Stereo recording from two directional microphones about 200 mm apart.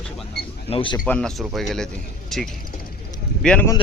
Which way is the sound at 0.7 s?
25° left (ahead or behind).